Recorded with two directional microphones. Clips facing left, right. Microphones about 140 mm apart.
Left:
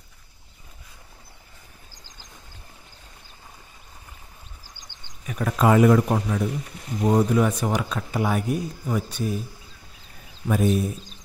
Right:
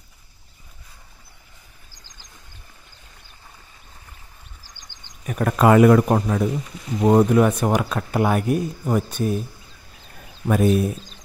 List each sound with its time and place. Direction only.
5.2 s speech: 50° right (ahead or behind)
10.4 s speech: 65° right (ahead or behind)